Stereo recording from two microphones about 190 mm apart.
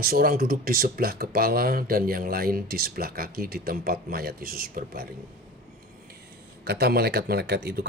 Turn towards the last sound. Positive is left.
turn(degrees=-60)  # may be behind; listen again after turning